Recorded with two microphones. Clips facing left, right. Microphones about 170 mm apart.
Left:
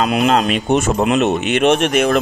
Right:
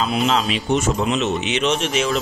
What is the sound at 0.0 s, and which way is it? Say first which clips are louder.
Speech: left 5 dB; 65° left (ahead or behind).